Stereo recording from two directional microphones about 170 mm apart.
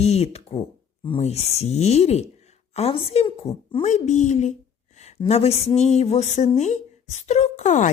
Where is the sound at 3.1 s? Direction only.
35° left (ahead or behind).